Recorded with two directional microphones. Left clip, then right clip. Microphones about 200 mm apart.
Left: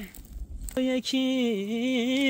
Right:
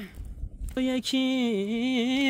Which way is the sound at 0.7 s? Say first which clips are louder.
Left 1 dB; 25° right (ahead or behind).